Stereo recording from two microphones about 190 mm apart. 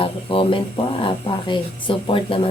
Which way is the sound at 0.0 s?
30° left (ahead or behind).